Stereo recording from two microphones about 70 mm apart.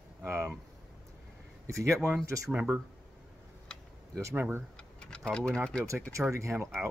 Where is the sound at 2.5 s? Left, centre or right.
Centre.